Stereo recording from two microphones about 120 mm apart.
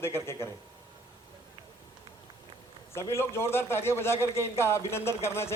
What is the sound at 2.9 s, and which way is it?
Speech, 20° left (ahead or behind).